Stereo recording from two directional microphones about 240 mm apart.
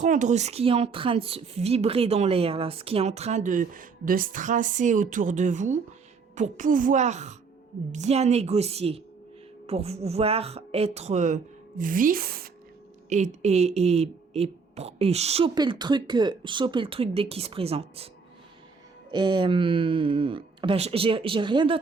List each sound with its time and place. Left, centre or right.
0.0 s a woman's voice: right
19.1 s speech: centre